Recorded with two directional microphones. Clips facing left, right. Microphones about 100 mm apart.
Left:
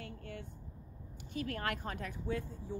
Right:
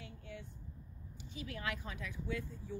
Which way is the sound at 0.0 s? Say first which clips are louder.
Left 4 dB; 55° left (ahead or behind).